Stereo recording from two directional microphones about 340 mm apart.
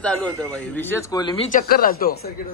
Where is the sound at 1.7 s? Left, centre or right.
Left.